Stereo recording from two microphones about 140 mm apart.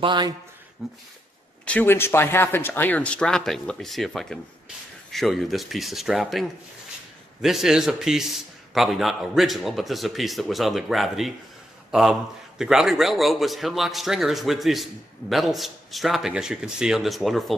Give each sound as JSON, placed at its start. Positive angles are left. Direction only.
{"t": 0.0, "sound": "speech", "side_deg": -35}
{"t": 0.8, "sound": "a man's voice", "side_deg": -5}
{"t": 1.7, "sound": "a man's voice", "side_deg": 15}